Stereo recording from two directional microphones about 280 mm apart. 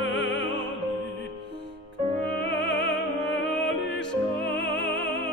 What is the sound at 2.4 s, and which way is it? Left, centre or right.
Music, left.